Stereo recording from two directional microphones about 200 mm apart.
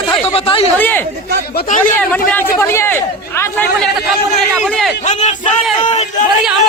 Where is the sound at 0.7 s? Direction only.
10° left (ahead or behind).